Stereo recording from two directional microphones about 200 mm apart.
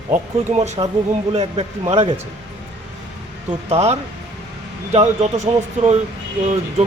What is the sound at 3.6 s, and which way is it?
Speech, 30° right (ahead or behind).